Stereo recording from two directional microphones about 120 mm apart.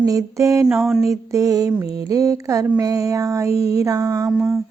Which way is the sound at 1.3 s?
30° right (ahead or behind).